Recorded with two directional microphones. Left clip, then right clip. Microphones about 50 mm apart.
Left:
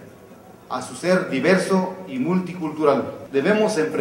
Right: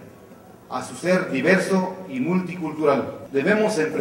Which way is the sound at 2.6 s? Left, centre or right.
Centre.